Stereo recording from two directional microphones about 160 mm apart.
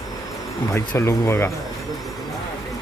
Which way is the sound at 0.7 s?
15° left (ahead or behind).